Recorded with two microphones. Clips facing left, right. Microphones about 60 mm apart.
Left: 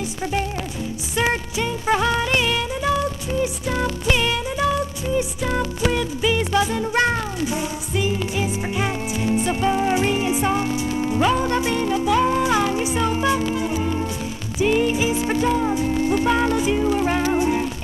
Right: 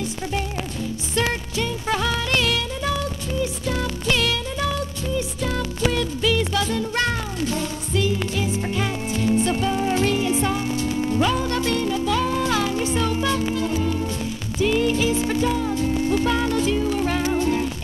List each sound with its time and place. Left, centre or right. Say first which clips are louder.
1.1 s music: left 2 dB; centre